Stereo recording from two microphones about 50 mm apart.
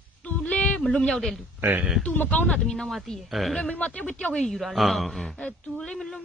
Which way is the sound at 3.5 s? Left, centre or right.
Left.